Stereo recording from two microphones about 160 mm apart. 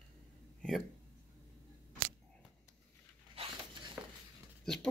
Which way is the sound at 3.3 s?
35° right (ahead or behind).